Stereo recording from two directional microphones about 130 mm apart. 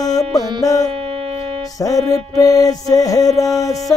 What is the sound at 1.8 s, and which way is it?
Mantra, 25° left (ahead or behind).